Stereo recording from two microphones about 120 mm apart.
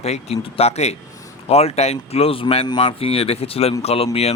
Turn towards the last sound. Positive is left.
turn(degrees=60)  # may be behind; listen again after turning